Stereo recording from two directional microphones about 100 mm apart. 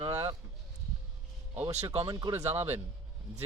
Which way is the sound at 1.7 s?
90° right.